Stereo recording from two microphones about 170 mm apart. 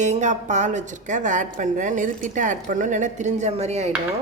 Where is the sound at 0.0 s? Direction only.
45° right (ahead or behind).